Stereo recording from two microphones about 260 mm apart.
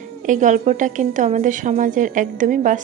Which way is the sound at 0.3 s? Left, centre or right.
Right.